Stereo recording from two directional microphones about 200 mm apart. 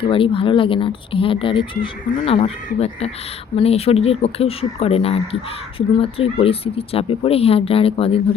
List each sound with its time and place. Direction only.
0.0 s speech: 25° left (ahead or behind)